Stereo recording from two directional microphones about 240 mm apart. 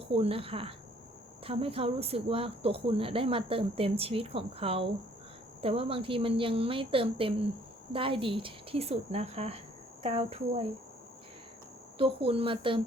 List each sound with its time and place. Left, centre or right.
0.1 s speech: right
11.9 s speech: right